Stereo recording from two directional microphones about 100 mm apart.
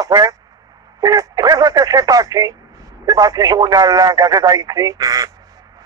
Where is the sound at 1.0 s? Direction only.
40° right (ahead or behind).